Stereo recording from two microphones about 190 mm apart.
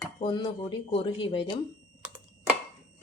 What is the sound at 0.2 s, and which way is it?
Speech, 30° left (ahead or behind).